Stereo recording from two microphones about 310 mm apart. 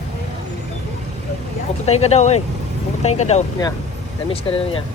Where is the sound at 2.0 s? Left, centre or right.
Left.